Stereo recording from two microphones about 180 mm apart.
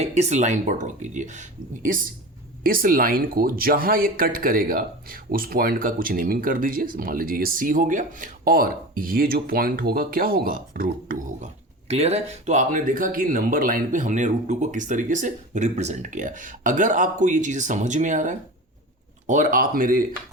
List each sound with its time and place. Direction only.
0.0 s speech: 40° right (ahead or behind)